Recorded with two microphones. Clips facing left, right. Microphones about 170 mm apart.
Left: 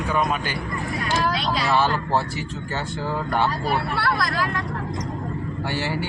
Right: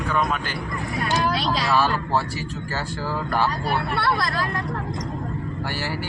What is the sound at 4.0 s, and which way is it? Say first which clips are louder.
Speech: even; 30° right (ahead or behind).